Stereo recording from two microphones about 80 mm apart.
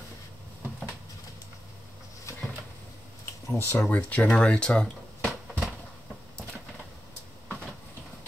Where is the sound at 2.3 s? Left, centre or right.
Left.